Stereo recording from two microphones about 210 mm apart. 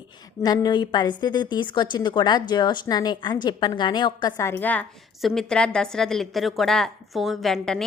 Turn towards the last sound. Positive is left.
turn(degrees=0)  # may be behind; listen again after turning